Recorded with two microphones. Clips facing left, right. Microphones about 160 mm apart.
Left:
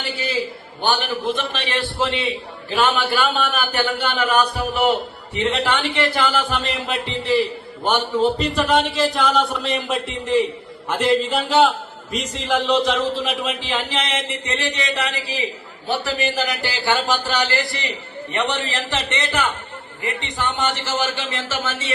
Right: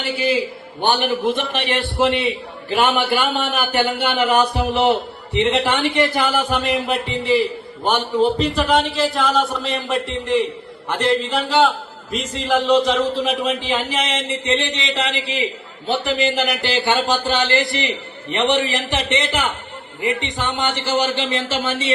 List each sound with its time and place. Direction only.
0.8 s a man's voice: 20° right (ahead or behind)
6.8 s a man's voice: centre (ahead or behind)
14.1 s a man's voice: 20° right (ahead or behind)